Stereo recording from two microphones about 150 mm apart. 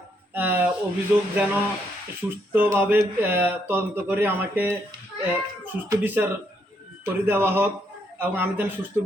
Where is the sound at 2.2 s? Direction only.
15° right (ahead or behind).